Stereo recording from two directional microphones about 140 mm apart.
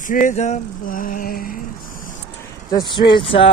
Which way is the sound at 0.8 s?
75° left (ahead or behind).